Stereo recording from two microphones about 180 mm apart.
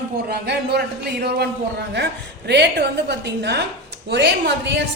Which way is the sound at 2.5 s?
70° right (ahead or behind).